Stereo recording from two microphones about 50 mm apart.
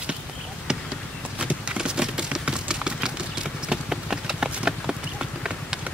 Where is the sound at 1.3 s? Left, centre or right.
Right.